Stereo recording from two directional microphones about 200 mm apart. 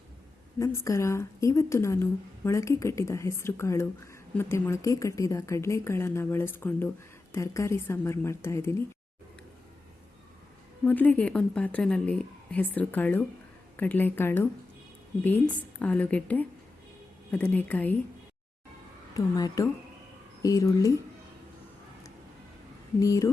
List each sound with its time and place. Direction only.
0.6 s a woman's voice: 15° left (ahead or behind)
10.8 s a woman's voice: 10° left (ahead or behind)
19.1 s a woman's voice: 15° left (ahead or behind)
23.0 s a woman's voice: 15° left (ahead or behind)